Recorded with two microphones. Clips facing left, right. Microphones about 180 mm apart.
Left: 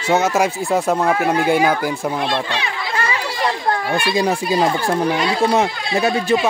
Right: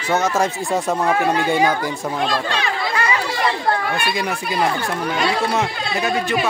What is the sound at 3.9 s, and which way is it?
Speech, 30° left (ahead or behind).